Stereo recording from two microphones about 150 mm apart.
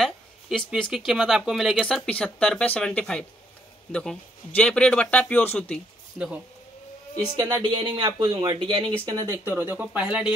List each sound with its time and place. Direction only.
0.0 s a sound: centre (ahead or behind)
0.8 s a man's voice: 5° right (ahead or behind)
6.1 s speech: 5° right (ahead or behind)
7.3 s speech: 25° right (ahead or behind); by 10.3 s 5° right (ahead or behind)